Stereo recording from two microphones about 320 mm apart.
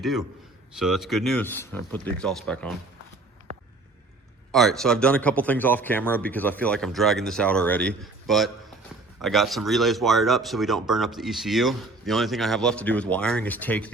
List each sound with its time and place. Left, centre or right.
0.0 s speech: centre
3.5 s a sound: centre
4.5 s speech: centre